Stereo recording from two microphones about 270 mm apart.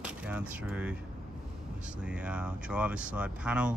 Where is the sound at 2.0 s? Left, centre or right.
Centre.